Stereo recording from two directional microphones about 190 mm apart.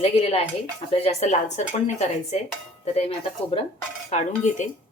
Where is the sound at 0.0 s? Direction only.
35° left (ahead or behind).